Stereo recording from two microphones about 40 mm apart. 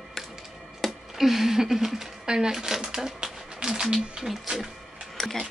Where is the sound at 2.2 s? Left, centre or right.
Centre.